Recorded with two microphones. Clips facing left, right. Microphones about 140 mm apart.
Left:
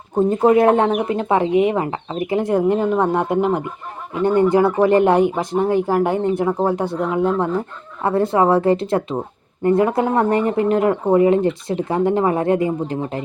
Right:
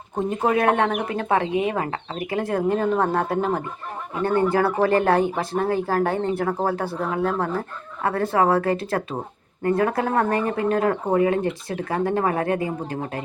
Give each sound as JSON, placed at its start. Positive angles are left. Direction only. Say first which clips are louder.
{"t": 0.3, "sound": "speech", "louder": "left 6 dB", "side_deg": 25}